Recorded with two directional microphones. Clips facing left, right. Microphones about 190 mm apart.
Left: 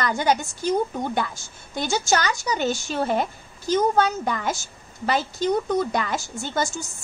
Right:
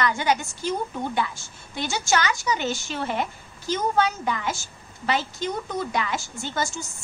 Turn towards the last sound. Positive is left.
turn(degrees=45)  # may be behind; listen again after turning